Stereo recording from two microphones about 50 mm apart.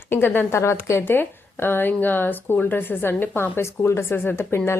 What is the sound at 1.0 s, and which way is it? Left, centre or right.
Speech, left.